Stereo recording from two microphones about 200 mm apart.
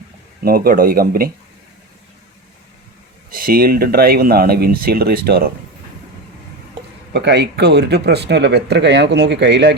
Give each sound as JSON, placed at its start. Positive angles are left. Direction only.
{"t": 0.4, "sound": "speech", "side_deg": -45}
{"t": 3.2, "sound": "speech", "side_deg": -45}
{"t": 7.1, "sound": "speech", "side_deg": -60}